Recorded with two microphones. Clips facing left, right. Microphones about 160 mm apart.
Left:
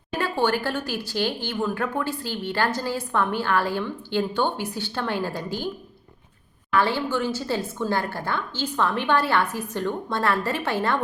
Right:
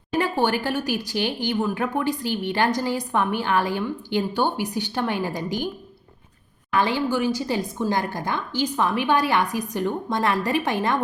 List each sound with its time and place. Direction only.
0.2 s speech: 15° right (ahead or behind)
6.7 s speech: 15° right (ahead or behind)